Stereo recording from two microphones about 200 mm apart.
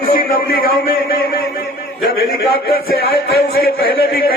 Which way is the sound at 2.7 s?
50° left (ahead or behind).